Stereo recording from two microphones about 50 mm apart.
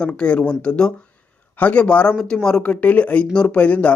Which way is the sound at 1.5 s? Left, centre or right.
Left.